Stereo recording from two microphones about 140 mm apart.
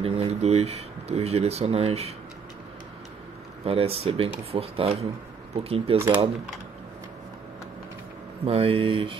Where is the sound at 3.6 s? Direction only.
45° right (ahead or behind).